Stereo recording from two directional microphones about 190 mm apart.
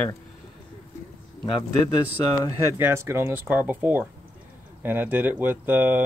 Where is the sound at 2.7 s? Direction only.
15° right (ahead or behind).